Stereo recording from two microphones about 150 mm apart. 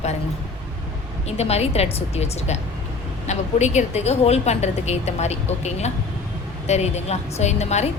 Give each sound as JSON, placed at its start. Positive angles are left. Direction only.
{"t": 1.3, "sound": "a woman's voice", "side_deg": 45}